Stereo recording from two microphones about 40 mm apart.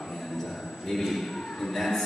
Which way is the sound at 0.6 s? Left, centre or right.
Centre.